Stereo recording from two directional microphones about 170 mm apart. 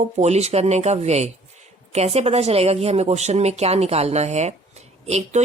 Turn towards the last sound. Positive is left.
turn(degrees=-40)  # may be behind; listen again after turning